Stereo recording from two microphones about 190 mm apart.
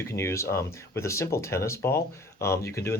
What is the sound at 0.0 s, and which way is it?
Speech, 15° left (ahead or behind).